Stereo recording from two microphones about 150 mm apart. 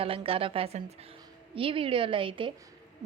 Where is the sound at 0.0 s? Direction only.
40° right (ahead or behind).